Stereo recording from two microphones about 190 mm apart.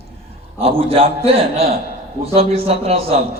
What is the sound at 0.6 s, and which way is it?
A man's voice, 30° right (ahead or behind).